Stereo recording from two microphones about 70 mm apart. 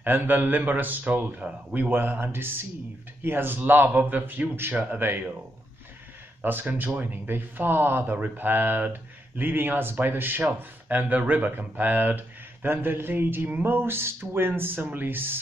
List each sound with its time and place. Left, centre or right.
0.0 s speech: right
6.4 s speech: right